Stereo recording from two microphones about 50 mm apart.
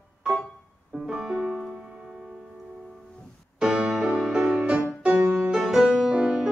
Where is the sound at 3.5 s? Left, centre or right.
Centre.